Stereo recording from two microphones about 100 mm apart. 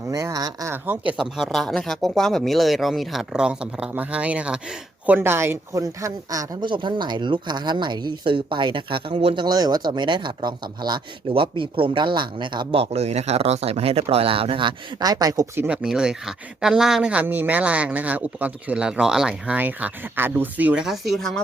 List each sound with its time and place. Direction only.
0.1 s speech: 35° right (ahead or behind)
0.7 s speech: 20° right (ahead or behind)
1.1 s speech: 5° right (ahead or behind); by 6.6 s 35° right (ahead or behind)
6.6 s speech: 50° right (ahead or behind); by 9.4 s 70° right (ahead or behind)
9.4 s speech: 40° right (ahead or behind)
12.7 s speech: 85° right; by 15.4 s 40° right (ahead or behind)
15.5 s speech: 15° right (ahead or behind)
20.8 s speech: centre (ahead or behind)